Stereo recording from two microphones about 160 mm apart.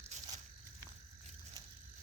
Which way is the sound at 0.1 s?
45° right (ahead or behind).